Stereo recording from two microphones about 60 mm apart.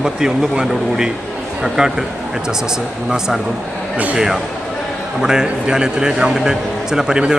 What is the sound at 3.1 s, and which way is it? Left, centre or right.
Speech, centre.